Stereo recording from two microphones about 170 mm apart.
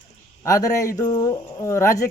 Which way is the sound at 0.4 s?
20° left (ahead or behind).